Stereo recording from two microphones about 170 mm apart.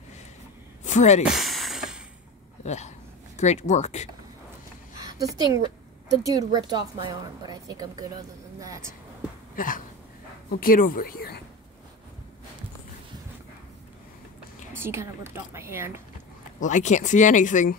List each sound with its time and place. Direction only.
0.8 s speech: 45° left (ahead or behind)
1.2 s a sound: centre (ahead or behind)
2.6 s speech: 40° left (ahead or behind)
4.9 s a woman's voice: 20° right (ahead or behind)
9.6 s speech: 55° left (ahead or behind)
14.7 s a woman's voice: 15° right (ahead or behind)
16.6 s speech: 45° left (ahead or behind)